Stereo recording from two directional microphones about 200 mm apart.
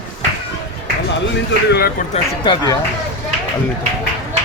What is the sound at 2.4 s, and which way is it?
Speech, 20° left (ahead or behind).